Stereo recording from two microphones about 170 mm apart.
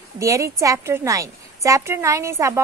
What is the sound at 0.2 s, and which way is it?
A woman's voice, 20° right (ahead or behind).